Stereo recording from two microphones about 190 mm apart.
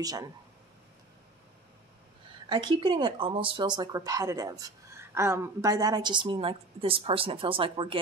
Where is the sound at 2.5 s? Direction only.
25° right (ahead or behind).